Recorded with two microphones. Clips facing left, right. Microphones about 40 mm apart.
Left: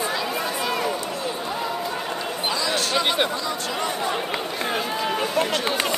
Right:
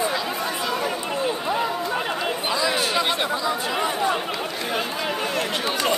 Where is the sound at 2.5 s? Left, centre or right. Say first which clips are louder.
Right 1 dB; centre.